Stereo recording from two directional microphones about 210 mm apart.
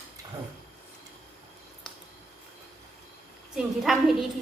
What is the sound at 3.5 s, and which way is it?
Speech, centre (ahead or behind).